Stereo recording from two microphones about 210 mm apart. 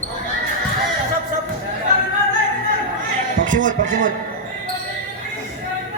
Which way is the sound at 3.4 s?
40° right (ahead or behind).